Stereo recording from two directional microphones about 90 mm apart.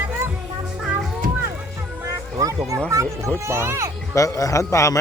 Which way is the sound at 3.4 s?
30° right (ahead or behind).